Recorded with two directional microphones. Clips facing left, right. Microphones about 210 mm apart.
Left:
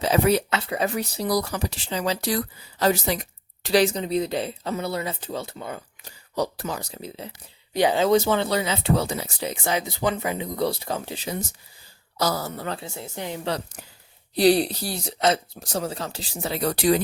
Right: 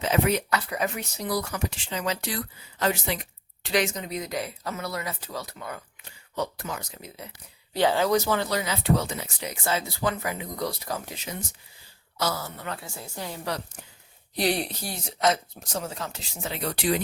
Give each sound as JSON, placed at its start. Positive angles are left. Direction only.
{"t": 0.0, "sound": "speech", "side_deg": 35}
{"t": 6.0, "sound": "speech", "side_deg": 35}
{"t": 7.7, "sound": "speech", "side_deg": 15}
{"t": 9.6, "sound": "speech", "side_deg": 20}
{"t": 14.3, "sound": "speech", "side_deg": 35}